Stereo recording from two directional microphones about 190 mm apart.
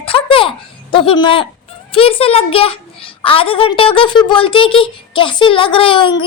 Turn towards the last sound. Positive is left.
turn(degrees=25)  # may be behind; listen again after turning